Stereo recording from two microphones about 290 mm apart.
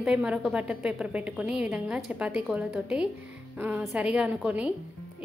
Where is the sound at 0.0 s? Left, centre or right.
Centre.